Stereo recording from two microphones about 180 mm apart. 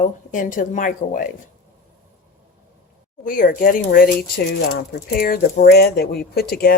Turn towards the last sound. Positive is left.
turn(degrees=60)  # may be behind; listen again after turning